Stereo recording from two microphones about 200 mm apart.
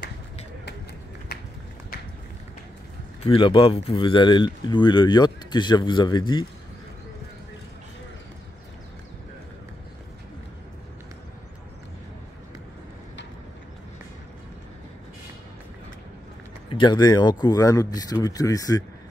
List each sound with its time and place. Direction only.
3.3 s speech: 25° left (ahead or behind)
16.6 s speech: 25° left (ahead or behind)